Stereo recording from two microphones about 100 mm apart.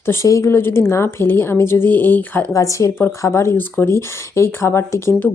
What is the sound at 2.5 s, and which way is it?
A woman's voice, 30° left (ahead or behind).